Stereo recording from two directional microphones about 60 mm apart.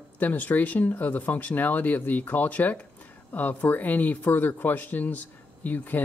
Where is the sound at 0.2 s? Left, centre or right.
Left.